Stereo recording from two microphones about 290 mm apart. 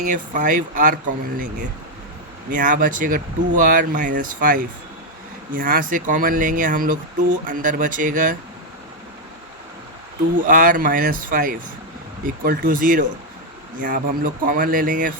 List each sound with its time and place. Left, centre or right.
0.0 s speech: right
2.5 s speech: right
10.3 s speech: right